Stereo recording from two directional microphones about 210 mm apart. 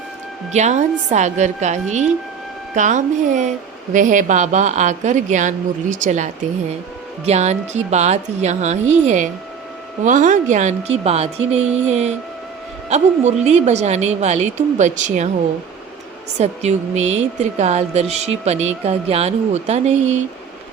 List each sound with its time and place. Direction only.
0.5 s a woman's voice: 35° right (ahead or behind)
16.4 s a woman's voice: 30° right (ahead or behind)